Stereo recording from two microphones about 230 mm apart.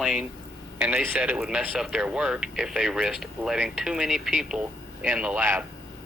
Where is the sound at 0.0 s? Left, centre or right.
Centre.